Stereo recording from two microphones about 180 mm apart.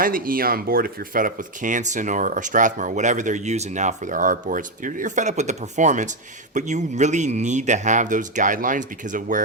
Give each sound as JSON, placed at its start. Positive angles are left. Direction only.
{"t": 0.0, "sound": "speech", "side_deg": -50}